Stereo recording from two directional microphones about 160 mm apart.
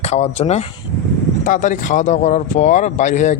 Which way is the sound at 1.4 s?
55° left (ahead or behind).